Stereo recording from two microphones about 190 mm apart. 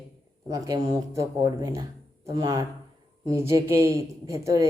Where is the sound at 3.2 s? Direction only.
15° right (ahead or behind).